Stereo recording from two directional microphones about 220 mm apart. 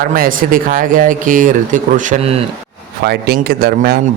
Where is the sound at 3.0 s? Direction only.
45° right (ahead or behind).